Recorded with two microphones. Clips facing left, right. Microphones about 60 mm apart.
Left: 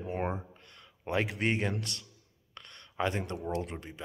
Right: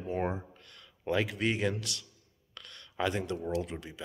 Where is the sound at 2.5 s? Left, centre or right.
Left.